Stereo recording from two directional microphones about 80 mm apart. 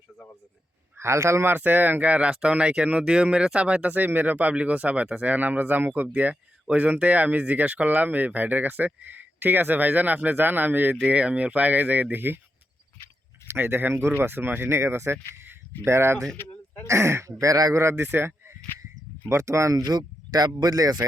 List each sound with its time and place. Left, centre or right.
0.9 s speech: right
13.5 s speech: right
17.4 s speech: right
17.7 s speech: right